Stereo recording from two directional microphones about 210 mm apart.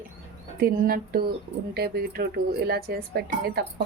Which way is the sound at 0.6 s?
45° right (ahead or behind).